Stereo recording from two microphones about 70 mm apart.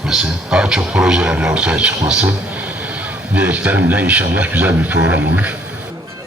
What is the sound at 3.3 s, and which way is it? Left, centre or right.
Speech, centre.